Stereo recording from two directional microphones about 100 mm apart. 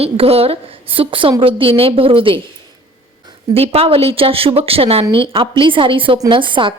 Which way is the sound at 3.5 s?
85° right.